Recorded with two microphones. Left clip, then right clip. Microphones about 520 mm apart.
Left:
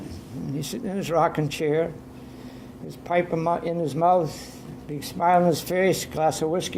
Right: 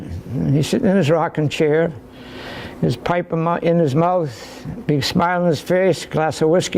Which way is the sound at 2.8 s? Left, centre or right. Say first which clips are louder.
Right 5 dB; right.